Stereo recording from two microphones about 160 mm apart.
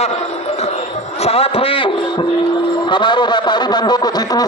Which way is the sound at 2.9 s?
30° left (ahead or behind).